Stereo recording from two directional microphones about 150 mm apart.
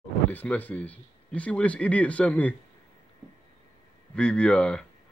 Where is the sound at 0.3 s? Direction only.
10° left (ahead or behind).